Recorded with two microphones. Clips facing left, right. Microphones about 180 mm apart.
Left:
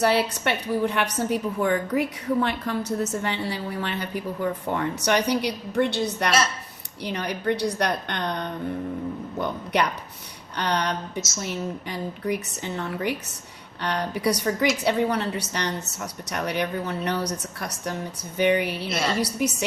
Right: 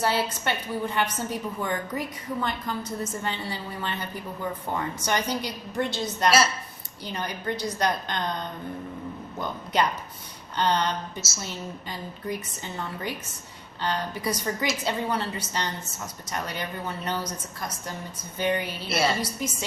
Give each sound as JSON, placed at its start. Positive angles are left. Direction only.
{"t": 0.0, "sound": "a woman's voice", "side_deg": 65}
{"t": 18.9, "sound": "a woman's voice", "side_deg": -5}
{"t": 19.2, "sound": "a woman's voice", "side_deg": 70}